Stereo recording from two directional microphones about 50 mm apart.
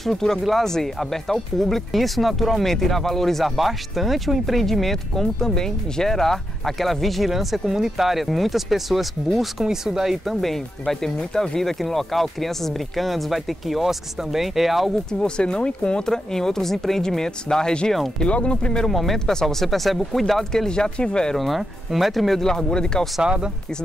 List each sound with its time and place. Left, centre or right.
0.0 s speech: centre
15.0 s speech: centre
18.9 s speech: centre
21.4 s speech: centre
23.2 s speech: centre